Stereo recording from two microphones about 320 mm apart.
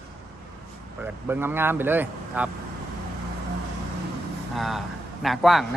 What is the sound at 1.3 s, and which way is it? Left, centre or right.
Speech, centre.